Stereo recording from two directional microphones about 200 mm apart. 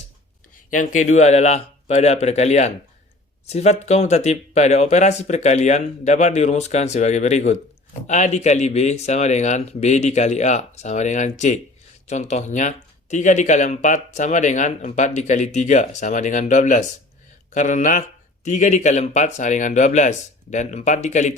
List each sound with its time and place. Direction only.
0.7 s speech: 40° left (ahead or behind)